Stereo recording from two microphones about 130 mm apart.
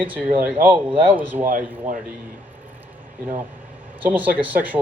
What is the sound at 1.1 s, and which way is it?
Speech, 15° right (ahead or behind).